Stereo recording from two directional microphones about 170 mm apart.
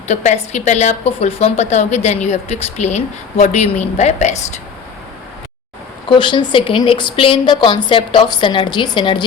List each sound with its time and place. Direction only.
0.1 s a woman's voice: 40° left (ahead or behind)
6.1 s a woman's voice: 30° left (ahead or behind)